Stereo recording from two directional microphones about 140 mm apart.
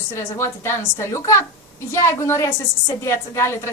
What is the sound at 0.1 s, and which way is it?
A woman's voice, 20° left (ahead or behind).